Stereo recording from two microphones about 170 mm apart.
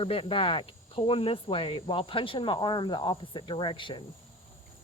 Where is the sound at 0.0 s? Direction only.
35° left (ahead or behind).